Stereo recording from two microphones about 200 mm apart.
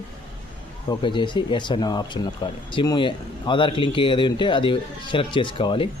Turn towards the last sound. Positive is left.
turn(degrees=25)  # may be behind; listen again after turning